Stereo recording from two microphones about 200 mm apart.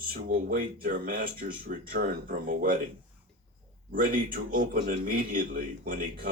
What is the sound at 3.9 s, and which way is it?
Speech, 45° right (ahead or behind).